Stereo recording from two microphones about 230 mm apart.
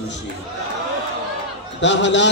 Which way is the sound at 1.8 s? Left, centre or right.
Left.